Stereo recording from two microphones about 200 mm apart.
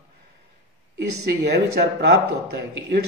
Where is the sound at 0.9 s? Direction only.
55° right (ahead or behind).